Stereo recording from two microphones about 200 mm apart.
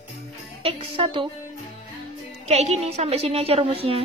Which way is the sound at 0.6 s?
25° right (ahead or behind).